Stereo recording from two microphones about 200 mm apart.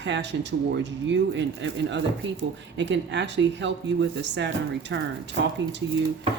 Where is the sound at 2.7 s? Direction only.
60° right (ahead or behind).